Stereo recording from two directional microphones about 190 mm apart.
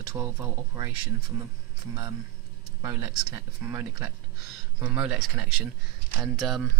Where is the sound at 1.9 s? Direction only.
20° right (ahead or behind).